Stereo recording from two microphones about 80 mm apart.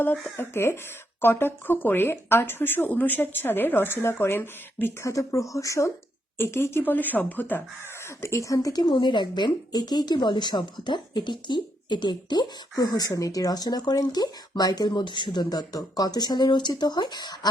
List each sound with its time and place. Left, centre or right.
0.3 s speech: left
5.0 s speech: left
6.3 s speech: left
8.0 s speech: left
8.8 s a woman's voice: left